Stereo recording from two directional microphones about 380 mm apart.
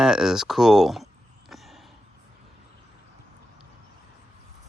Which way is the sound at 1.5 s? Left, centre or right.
Centre.